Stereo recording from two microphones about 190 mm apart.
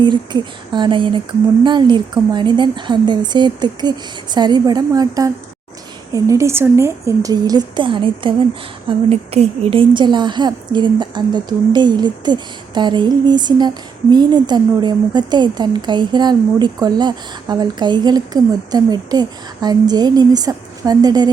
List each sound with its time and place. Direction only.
0.0 s a woman's voice: 25° right (ahead or behind)